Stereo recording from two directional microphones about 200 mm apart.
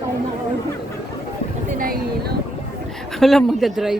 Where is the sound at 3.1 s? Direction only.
Centre (ahead or behind).